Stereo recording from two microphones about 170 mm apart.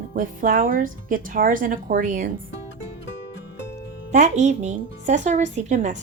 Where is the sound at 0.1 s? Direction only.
55° right (ahead or behind).